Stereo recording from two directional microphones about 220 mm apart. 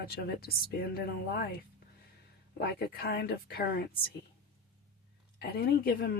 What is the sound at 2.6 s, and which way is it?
A woman's voice, 45° left (ahead or behind).